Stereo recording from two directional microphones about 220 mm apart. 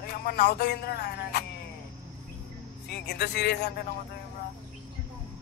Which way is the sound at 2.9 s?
50° left (ahead or behind).